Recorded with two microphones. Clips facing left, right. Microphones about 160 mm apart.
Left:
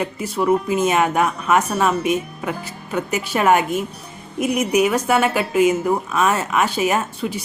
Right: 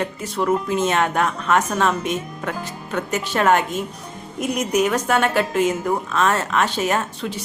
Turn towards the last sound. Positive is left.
turn(degrees=10)  # may be behind; listen again after turning